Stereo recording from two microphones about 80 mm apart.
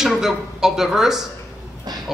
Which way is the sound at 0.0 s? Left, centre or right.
Centre.